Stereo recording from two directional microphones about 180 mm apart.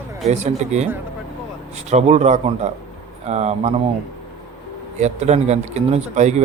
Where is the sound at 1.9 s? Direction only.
40° right (ahead or behind).